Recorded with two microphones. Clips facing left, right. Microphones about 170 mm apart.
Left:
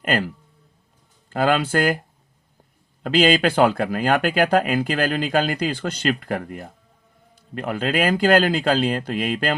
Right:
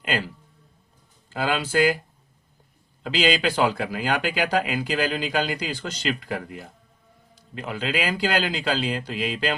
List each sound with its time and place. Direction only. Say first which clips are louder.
0.0 s speech: left 5 dB; 50° left (ahead or behind)
1.3 s speech: left 5 dB; 50° left (ahead or behind)
3.0 s speech: left 5 dB; 50° left (ahead or behind)